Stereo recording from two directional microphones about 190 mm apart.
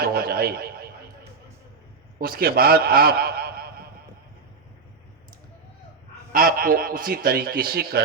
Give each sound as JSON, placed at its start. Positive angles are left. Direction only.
{"t": 0.0, "sound": "a sound", "side_deg": -55}
{"t": 2.1, "sound": "a man's voice", "side_deg": -50}
{"t": 6.3, "sound": "a man's voice", "side_deg": -50}